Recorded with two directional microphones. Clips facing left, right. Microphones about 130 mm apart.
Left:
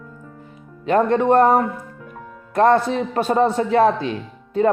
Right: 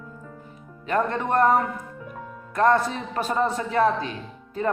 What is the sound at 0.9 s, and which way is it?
A man's voice, 35° left (ahead or behind).